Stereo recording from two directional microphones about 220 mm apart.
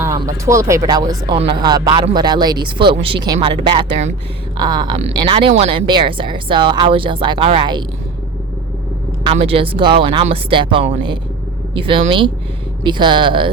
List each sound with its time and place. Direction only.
0.4 s speech: 15° right (ahead or behind)
9.2 s speech: 25° right (ahead or behind)